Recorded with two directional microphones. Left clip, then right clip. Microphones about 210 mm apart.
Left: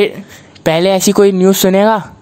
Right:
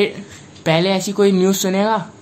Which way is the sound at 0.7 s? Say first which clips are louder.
Left 6 dB; 50° left (ahead or behind).